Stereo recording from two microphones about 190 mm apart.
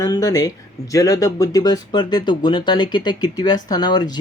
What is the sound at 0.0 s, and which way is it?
Speech, 20° left (ahead or behind).